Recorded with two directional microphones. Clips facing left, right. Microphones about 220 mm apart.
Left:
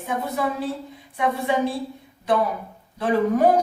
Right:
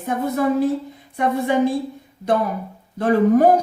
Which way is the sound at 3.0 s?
45° right (ahead or behind).